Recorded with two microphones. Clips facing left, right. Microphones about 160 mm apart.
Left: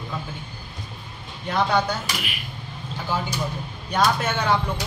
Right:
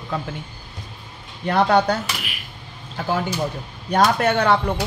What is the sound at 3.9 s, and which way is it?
Speech, 65° right (ahead or behind).